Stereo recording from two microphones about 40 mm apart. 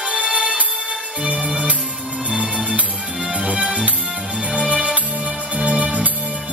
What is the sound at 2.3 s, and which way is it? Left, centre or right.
Music, right.